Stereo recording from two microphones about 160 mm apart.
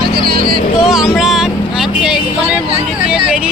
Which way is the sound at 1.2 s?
5° right (ahead or behind).